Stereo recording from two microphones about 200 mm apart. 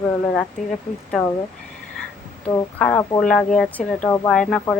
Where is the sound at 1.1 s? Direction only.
Centre (ahead or behind).